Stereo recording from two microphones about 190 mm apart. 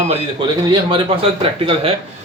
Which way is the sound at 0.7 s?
25° right (ahead or behind).